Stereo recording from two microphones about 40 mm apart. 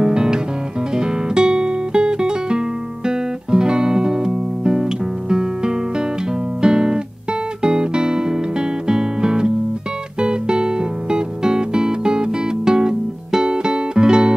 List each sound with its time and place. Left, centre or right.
0.0 s music: centre